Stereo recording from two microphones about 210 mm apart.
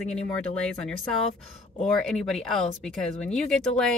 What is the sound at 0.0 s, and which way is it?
Speech, 5° left (ahead or behind).